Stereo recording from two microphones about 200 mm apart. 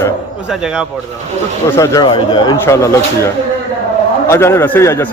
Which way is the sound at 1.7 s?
15° left (ahead or behind).